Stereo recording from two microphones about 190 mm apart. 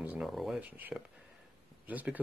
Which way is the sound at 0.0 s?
5° right (ahead or behind).